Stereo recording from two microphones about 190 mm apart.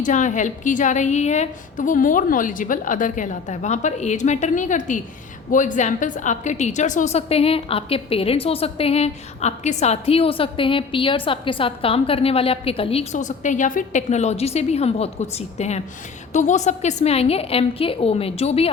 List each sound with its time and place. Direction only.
0.0 s a woman's voice: 40° left (ahead or behind)